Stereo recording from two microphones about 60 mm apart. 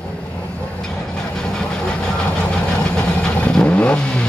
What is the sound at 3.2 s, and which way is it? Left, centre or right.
Vehicle, centre.